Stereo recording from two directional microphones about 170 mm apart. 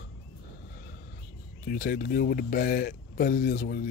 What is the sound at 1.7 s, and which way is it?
Speech, 60° left (ahead or behind).